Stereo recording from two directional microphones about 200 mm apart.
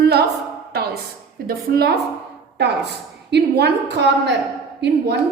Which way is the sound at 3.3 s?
55° right (ahead or behind).